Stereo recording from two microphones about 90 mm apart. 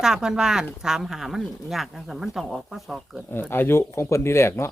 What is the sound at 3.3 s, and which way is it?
Speech, 25° left (ahead or behind).